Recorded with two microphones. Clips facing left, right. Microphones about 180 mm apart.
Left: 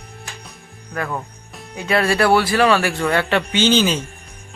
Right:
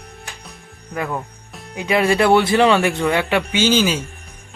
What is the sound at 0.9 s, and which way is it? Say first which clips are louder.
Speech: right 1 dB; 10° right (ahead or behind).